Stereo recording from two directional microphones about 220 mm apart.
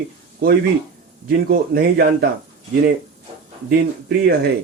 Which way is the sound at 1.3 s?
45° right (ahead or behind).